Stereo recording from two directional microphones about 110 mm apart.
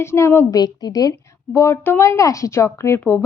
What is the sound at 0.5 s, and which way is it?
A woman's voice, 35° left (ahead or behind).